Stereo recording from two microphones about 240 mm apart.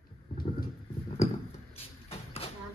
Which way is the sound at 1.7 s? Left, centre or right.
Left.